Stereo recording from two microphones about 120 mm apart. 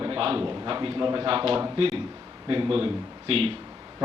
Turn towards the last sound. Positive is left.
turn(degrees=-50)  # may be behind; listen again after turning